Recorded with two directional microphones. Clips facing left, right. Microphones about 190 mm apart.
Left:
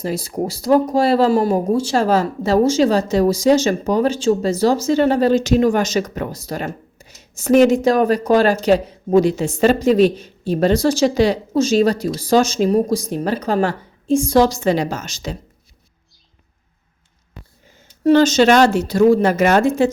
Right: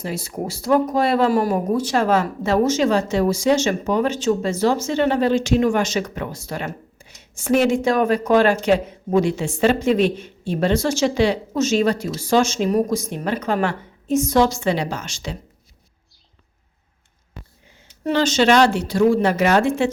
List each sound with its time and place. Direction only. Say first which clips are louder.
0.0 s speech: left 5 dB; 35° left (ahead or behind)
17.7 s speech: left 8 dB; 45° left (ahead or behind)